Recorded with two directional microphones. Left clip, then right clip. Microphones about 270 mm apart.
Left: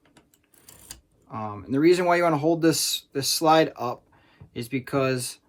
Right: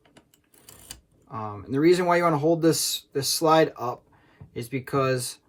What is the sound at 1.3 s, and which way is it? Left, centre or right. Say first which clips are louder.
Speech: left 1 dB; left.